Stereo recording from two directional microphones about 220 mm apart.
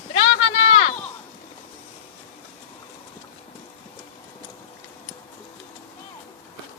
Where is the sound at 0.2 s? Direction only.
25° left (ahead or behind).